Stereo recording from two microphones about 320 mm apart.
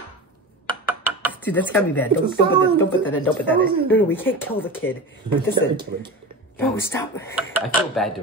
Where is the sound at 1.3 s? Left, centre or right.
Centre.